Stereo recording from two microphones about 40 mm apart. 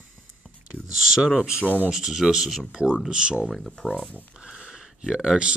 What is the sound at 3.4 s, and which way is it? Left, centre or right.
Speech, centre.